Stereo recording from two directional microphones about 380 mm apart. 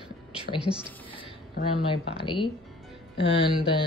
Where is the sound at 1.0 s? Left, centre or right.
Centre.